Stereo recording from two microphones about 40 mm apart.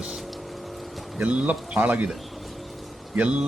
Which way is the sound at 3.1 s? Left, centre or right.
Right.